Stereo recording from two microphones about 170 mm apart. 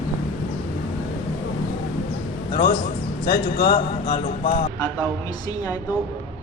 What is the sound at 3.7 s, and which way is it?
Speech, 25° left (ahead or behind).